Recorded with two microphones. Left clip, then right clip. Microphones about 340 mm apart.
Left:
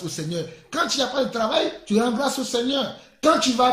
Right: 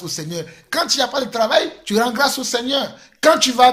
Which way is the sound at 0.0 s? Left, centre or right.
Centre.